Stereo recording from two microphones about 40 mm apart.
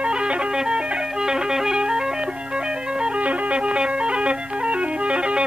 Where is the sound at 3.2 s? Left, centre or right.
Right.